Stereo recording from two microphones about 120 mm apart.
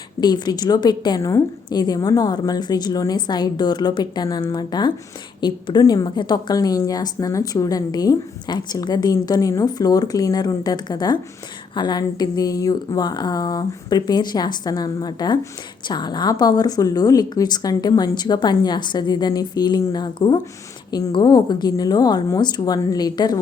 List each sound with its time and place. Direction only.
0.2 s a woman's voice: 35° left (ahead or behind)